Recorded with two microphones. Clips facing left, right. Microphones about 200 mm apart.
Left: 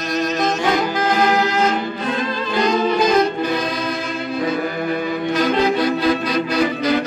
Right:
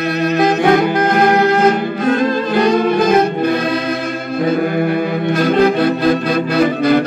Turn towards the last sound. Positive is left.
turn(degrees=-55)  # may be behind; listen again after turning